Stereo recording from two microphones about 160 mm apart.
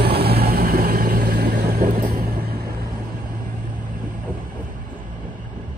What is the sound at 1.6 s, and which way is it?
Vehicle, 65° right (ahead or behind).